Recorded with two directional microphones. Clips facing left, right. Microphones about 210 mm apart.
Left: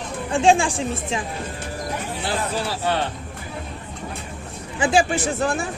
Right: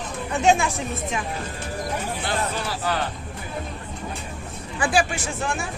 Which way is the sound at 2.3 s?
30° left (ahead or behind).